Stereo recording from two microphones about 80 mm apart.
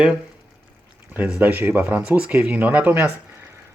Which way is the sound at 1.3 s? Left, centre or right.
Centre.